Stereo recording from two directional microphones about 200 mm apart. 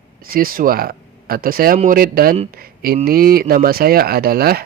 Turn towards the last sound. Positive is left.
turn(degrees=-50)  # may be behind; listen again after turning